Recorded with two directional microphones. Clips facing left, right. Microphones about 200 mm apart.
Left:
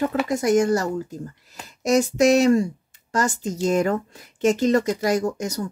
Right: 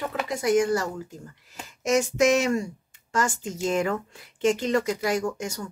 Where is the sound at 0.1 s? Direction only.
45° left (ahead or behind).